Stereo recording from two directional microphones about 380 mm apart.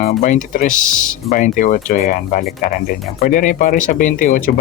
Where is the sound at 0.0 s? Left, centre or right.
Left.